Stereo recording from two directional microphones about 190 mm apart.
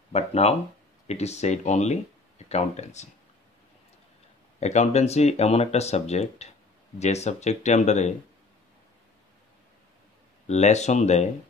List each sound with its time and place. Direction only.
0.1 s speech: 35° left (ahead or behind)
4.6 s speech: 35° left (ahead or behind)
10.4 s speech: 35° left (ahead or behind)